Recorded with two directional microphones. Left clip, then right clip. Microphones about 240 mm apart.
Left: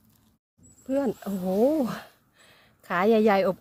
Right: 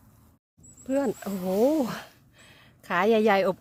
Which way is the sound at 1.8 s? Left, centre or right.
Centre.